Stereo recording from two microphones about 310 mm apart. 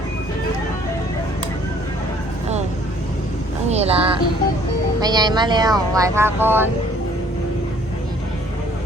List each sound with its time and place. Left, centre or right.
3.7 s speech: centre